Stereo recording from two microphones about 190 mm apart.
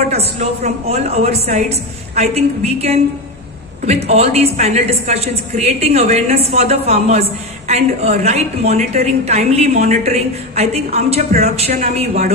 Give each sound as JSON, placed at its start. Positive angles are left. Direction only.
{"t": 0.1, "sound": "a woman's voice", "side_deg": -35}